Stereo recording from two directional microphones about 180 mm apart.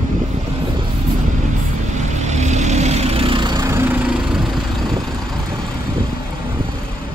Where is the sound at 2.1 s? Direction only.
40° right (ahead or behind); by 3.7 s 25° right (ahead or behind).